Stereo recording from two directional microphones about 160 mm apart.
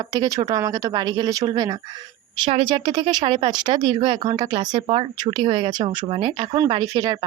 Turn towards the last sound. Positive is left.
turn(degrees=-25)  # may be behind; listen again after turning